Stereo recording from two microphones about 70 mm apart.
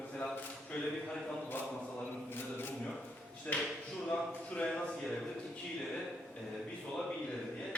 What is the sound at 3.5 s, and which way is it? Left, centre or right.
Speech, centre.